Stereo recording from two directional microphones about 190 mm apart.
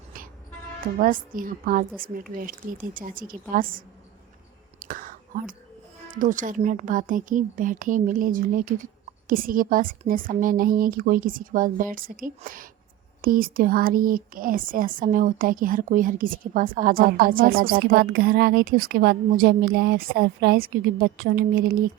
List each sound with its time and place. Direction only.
0.9 s speech: 45° right (ahead or behind)
4.8 s whispering: 45° right (ahead or behind)
6.1 s speech: 45° right (ahead or behind)